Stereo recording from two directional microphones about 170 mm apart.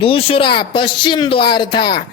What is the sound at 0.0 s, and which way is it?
Speech, 30° left (ahead or behind).